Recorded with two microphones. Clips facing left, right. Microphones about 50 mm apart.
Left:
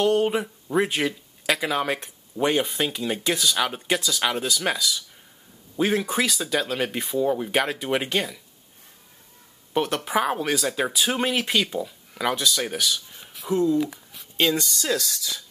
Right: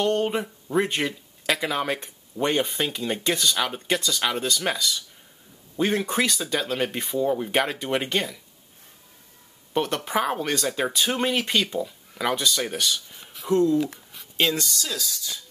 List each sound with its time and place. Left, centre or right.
0.0 s speech: centre
9.8 s speech: centre
14.1 s a sound: centre
14.9 s speech: left